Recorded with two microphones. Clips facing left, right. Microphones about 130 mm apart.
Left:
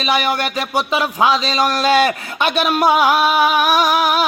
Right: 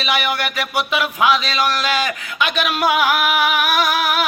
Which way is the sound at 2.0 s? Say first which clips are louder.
Left 3 dB; 35° left (ahead or behind).